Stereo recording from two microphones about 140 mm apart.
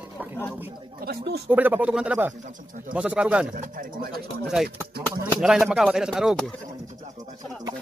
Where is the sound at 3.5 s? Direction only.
80° right.